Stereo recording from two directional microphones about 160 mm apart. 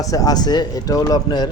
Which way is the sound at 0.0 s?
20° left (ahead or behind).